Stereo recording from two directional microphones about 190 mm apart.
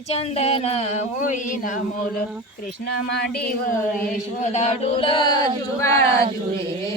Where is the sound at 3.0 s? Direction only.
60° left (ahead or behind).